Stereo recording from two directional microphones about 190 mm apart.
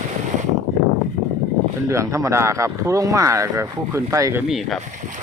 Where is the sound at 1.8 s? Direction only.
15° right (ahead or behind).